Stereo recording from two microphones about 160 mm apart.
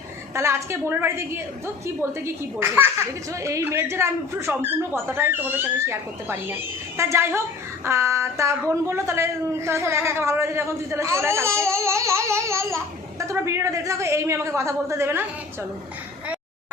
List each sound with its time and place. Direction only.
0.3 s a woman's voice: 15° right (ahead or behind)